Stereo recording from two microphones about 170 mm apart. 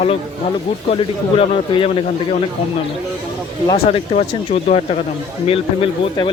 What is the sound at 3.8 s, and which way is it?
Speech, 40° left (ahead or behind).